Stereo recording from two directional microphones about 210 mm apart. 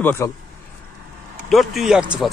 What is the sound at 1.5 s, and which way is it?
Speech, centre (ahead or behind).